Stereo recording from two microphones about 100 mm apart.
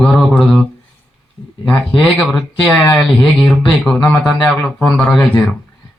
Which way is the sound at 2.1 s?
10° left (ahead or behind).